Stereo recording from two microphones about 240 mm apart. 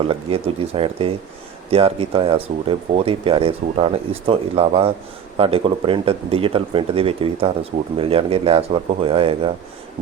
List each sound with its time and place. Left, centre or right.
0.1 s speech: right